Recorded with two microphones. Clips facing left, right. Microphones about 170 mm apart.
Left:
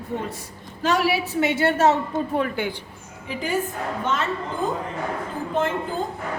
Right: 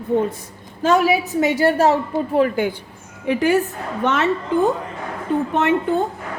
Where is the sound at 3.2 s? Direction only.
70° right (ahead or behind).